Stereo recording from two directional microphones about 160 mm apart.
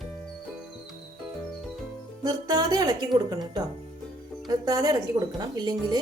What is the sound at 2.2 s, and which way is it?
A woman's voice, 25° right (ahead or behind).